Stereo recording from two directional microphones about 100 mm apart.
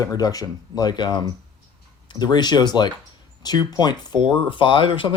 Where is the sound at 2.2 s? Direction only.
45° left (ahead or behind).